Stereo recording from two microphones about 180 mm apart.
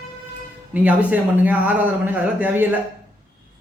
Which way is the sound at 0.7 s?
10° right (ahead or behind).